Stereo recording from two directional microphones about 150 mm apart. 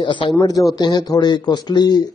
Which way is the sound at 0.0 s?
30° left (ahead or behind).